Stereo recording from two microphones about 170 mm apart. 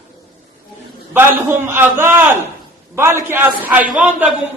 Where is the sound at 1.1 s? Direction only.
15° right (ahead or behind).